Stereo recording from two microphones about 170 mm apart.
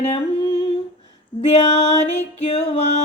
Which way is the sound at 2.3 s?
35° left (ahead or behind).